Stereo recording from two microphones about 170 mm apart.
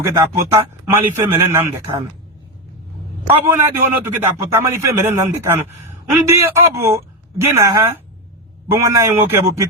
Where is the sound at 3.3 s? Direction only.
15° right (ahead or behind).